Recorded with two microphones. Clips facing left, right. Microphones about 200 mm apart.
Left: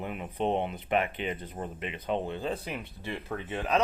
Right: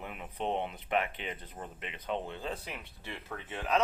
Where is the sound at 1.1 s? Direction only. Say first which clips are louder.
Left 7 dB; 5° left (ahead or behind).